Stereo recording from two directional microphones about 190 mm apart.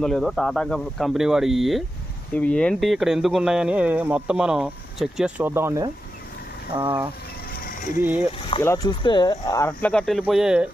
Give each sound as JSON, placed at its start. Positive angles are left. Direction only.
{"t": 0.0, "sound": "speech", "side_deg": 0}
{"t": 6.7, "sound": "speech", "side_deg": -25}
{"t": 7.5, "sound": "a sound", "side_deg": 45}
{"t": 8.0, "sound": "speech", "side_deg": -10}
{"t": 8.6, "sound": "speech", "side_deg": 15}